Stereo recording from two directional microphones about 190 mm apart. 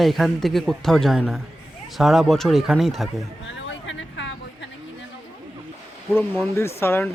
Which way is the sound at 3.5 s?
75° left (ahead or behind).